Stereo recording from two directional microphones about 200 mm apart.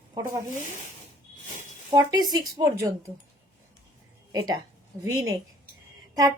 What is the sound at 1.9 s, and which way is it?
Speech, 20° right (ahead or behind).